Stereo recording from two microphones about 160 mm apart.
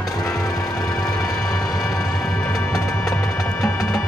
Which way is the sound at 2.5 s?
20° left (ahead or behind).